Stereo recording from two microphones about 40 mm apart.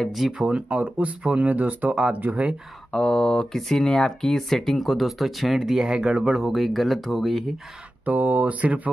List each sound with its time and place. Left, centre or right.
0.1 s speech: centre
0.5 s speech: right
2.9 s speech: centre; by 6.3 s right
6.3 s speech: centre
8.0 s speech: right